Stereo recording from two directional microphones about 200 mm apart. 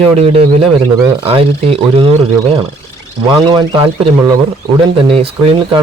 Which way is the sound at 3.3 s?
20° right (ahead or behind).